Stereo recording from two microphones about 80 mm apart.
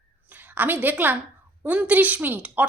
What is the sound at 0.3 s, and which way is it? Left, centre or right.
A woman's voice, right.